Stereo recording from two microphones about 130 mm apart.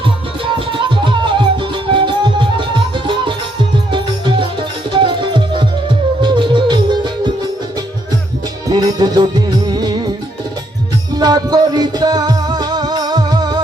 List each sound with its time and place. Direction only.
0.7 s music: 40° right (ahead or behind)
8.7 s music: 35° right (ahead or behind)
11.2 s music: 30° right (ahead or behind)